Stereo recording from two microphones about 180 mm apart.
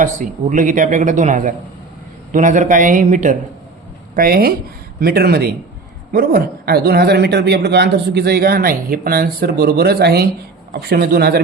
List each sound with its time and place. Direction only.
0.0 s speech: 45° right (ahead or behind); by 11.4 s 60° right (ahead or behind)